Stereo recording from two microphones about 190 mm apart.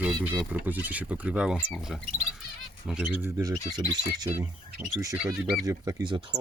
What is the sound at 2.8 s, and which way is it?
Speech, 5° right (ahead or behind).